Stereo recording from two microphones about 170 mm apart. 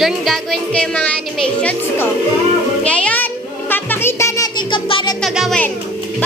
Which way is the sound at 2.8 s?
5° left (ahead or behind).